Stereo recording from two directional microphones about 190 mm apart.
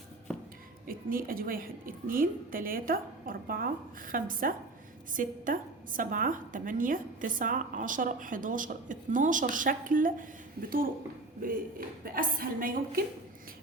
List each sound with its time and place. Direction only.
0.9 s a woman's voice: 50° right (ahead or behind)